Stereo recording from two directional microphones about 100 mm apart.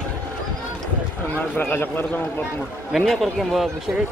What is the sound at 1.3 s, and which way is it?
Speech, 20° left (ahead or behind).